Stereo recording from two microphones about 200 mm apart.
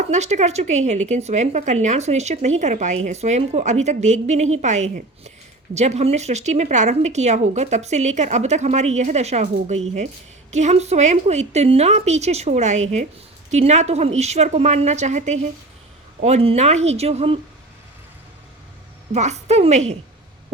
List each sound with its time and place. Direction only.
0.1 s a woman's voice: 35° right (ahead or behind)
19.1 s a woman's voice: 35° right (ahead or behind)